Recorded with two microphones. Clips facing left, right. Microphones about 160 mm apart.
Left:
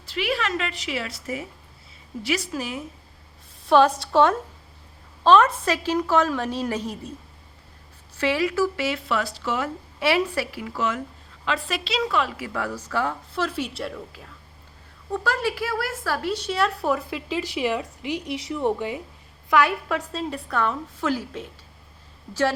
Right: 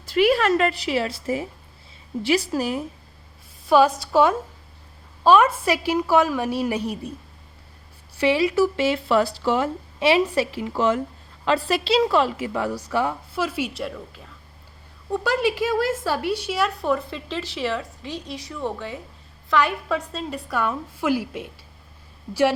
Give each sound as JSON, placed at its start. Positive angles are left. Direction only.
{"t": 0.0, "sound": "a woman's voice", "side_deg": -45}
{"t": 3.7, "sound": "a woman's voice", "side_deg": 0}
{"t": 8.1, "sound": "a woman's voice", "side_deg": -15}
{"t": 8.8, "sound": "a woman's voice", "side_deg": -30}
{"t": 12.5, "sound": "a woman's voice", "side_deg": -15}
{"t": 15.1, "sound": "speech", "side_deg": -15}
{"t": 16.4, "sound": "a woman's voice", "side_deg": -5}